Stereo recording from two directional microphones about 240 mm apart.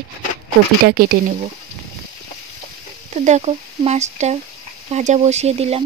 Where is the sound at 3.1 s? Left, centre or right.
Right.